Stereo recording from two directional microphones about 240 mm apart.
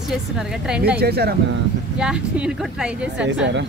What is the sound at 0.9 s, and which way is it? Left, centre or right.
Speech, right.